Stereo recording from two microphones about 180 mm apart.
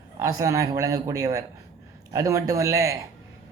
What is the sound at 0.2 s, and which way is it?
A man's voice, 20° right (ahead or behind).